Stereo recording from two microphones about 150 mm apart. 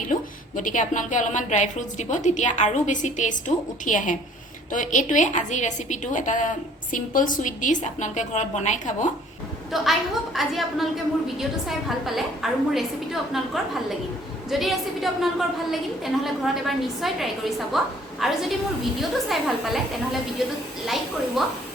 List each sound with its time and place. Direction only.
0.1 s a woman's voice: 60° left (ahead or behind)
9.7 s a woman's voice: centre (ahead or behind)
14.5 s a woman's voice: centre (ahead or behind)
20.8 s a woman's voice: centre (ahead or behind)